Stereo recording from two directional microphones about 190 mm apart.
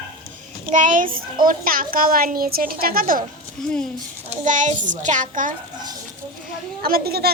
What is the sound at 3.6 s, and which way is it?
Speech, 5° left (ahead or behind).